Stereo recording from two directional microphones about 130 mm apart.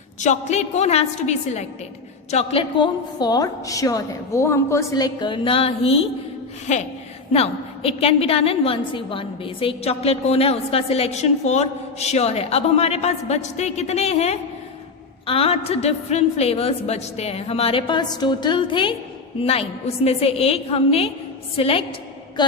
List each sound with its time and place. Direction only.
0.2 s a woman's voice: 65° left (ahead or behind)
6.7 s a woman's voice: 65° left (ahead or behind)
7.3 s a woman's voice: 50° left (ahead or behind)
22.4 s a woman's voice: 35° left (ahead or behind)